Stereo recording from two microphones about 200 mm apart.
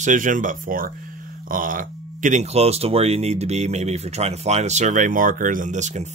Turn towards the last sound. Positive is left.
turn(degrees=-35)  # may be behind; listen again after turning